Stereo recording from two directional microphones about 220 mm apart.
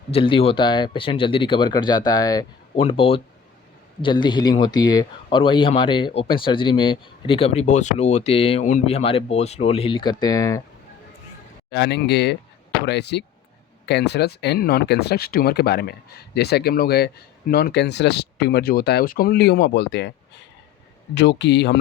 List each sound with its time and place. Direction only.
0.1 s speech: 25° left (ahead or behind)
11.7 s speech: 50° left (ahead or behind)
21.2 s speech: 50° left (ahead or behind)